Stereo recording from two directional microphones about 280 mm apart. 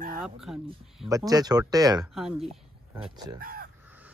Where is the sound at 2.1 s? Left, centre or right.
Centre.